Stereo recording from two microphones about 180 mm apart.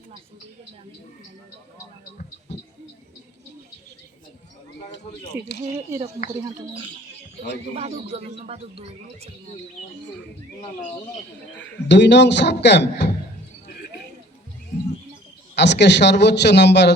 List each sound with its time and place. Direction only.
5.3 s speech: 10° right (ahead or behind)
7.8 s speech: 35° right (ahead or behind)
11.9 s speech: 75° left (ahead or behind)
15.5 s speech: 70° left (ahead or behind)